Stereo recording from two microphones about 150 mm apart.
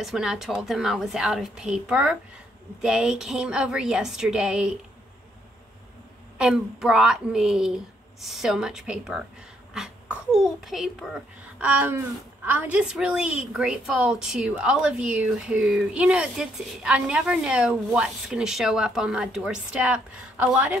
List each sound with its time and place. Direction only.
0.0 s a woman's voice: 5° right (ahead or behind)
6.3 s a woman's voice: 5° right (ahead or behind)
11.6 s a sound: 10° right (ahead or behind)
12.4 s a woman's voice: 10° right (ahead or behind)